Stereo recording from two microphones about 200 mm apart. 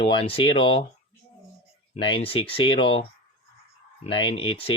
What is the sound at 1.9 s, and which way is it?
Speech, 25° left (ahead or behind).